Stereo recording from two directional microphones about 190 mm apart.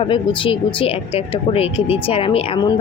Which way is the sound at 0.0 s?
30° left (ahead or behind).